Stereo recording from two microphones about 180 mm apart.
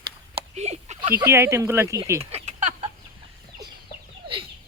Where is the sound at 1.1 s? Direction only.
15° right (ahead or behind).